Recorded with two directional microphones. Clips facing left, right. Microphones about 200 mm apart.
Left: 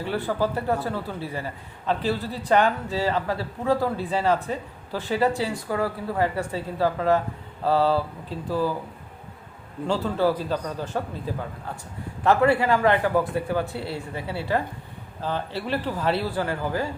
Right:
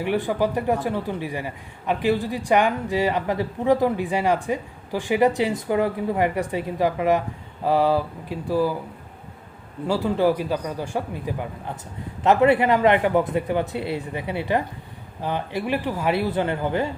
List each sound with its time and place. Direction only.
0.0 s speech: 15° right (ahead or behind)
9.8 s a man's voice: 10° right (ahead or behind)